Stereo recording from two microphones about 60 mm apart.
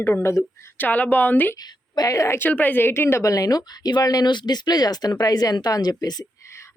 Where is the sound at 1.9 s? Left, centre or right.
Left.